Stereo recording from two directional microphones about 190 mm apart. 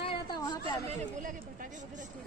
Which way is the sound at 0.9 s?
40° right (ahead or behind).